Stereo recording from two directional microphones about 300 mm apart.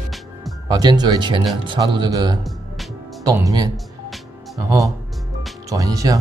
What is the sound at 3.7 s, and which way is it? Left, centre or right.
Music, centre.